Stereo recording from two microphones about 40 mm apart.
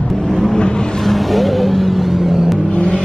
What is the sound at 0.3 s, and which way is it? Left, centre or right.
Vehicle, centre.